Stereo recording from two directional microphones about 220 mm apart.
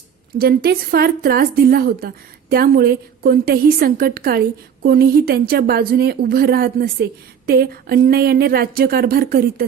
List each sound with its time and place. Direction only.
0.3 s a woman's voice: 45° right (ahead or behind)